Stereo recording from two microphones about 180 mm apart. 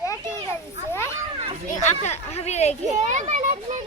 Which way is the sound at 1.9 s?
35° left (ahead or behind).